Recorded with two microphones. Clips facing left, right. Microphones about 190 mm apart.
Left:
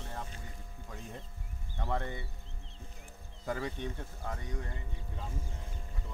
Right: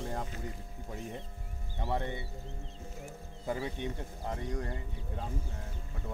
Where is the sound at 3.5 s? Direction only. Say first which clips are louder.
Right 1 dB; 10° right (ahead or behind).